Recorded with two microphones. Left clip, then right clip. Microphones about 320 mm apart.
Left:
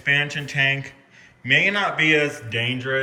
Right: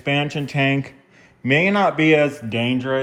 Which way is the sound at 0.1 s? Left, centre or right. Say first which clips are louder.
Left 1 dB; centre.